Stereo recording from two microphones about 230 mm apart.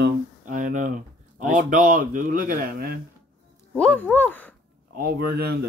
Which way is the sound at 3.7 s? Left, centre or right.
Centre.